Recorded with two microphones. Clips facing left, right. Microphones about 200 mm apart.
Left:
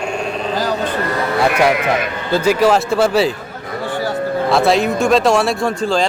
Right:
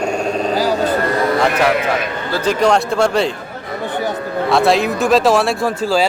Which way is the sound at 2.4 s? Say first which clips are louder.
Left 1 dB; 5° left (ahead or behind).